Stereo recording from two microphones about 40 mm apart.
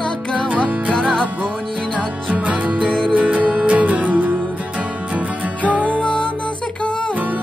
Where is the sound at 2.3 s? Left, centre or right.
Right.